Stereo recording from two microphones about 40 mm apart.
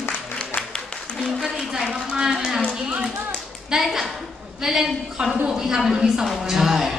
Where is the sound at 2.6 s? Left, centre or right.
Right.